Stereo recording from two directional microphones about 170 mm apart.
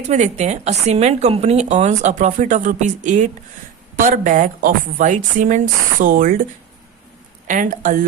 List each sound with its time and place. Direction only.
0.0 s a woman's voice: 45° right (ahead or behind)
7.4 s a woman's voice: 50° right (ahead or behind)